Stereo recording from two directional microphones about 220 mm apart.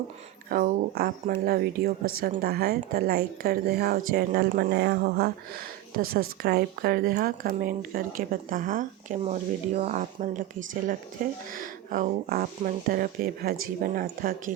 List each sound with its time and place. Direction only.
0.5 s a woman's voice: 40° right (ahead or behind)